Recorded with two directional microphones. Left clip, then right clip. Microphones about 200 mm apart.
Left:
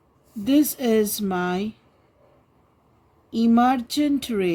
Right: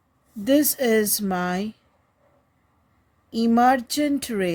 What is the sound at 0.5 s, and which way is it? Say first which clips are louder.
Speech: even; 40° right (ahead or behind).